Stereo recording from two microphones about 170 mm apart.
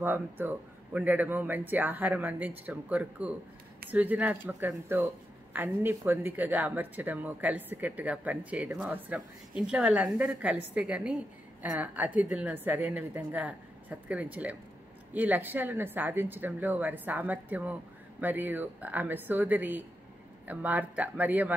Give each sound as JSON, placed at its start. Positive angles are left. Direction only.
{"t": 0.0, "sound": "speech", "side_deg": -10}